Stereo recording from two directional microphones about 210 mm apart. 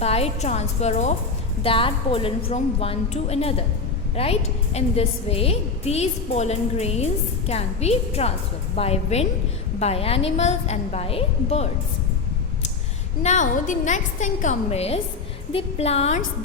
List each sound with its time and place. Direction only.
0.0 s a woman's voice: 30° left (ahead or behind)
13.2 s a woman's voice: 35° left (ahead or behind)